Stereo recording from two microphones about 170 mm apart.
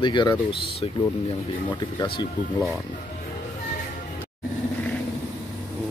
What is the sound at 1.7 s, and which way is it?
Speech, 25° left (ahead or behind).